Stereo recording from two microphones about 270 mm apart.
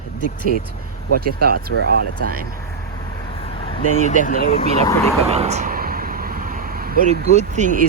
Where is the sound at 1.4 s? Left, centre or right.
Right.